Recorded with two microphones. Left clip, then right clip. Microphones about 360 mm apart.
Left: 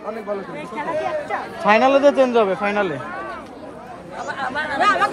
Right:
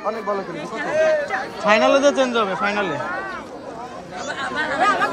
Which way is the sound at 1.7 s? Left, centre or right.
Centre.